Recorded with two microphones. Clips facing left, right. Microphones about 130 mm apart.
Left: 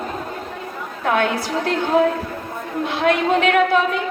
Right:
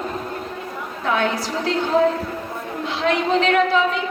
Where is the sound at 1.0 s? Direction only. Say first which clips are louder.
Left 2 dB; 55° left (ahead or behind).